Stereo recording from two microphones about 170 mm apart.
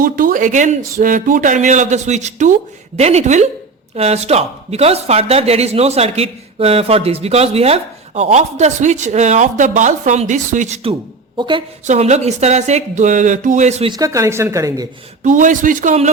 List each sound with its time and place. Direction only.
0.0 s speech: 55° right (ahead or behind)
11.3 s speech: 30° right (ahead or behind)
11.9 s speech: 40° right (ahead or behind)
13.9 s speech: 20° right (ahead or behind)
15.2 s speech: 50° right (ahead or behind)